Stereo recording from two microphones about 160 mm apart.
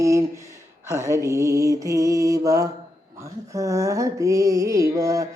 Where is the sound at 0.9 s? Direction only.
20° right (ahead or behind).